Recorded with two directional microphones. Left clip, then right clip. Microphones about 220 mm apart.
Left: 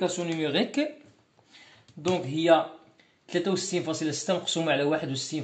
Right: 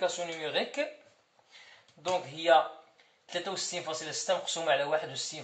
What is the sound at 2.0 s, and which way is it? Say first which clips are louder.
Speech: left 4 dB; 45° left (ahead or behind).